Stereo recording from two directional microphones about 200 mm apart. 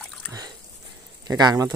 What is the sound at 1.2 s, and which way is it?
Speech, 20° right (ahead or behind).